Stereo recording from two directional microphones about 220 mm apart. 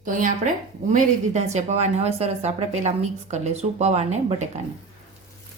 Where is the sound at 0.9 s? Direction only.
35° right (ahead or behind).